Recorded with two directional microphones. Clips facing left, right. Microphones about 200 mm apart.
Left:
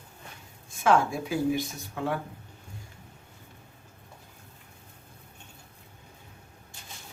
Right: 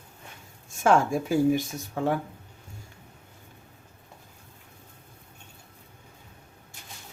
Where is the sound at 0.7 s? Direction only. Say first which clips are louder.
Right 2 dB; 45° right (ahead or behind).